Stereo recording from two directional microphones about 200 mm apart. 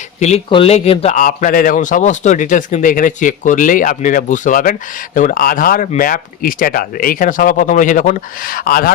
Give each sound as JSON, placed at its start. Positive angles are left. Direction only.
{"t": 0.2, "sound": "a man's voice", "side_deg": 30}